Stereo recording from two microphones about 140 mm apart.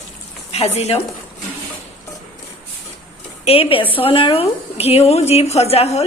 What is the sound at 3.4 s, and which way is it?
A woman's voice, 45° left (ahead or behind).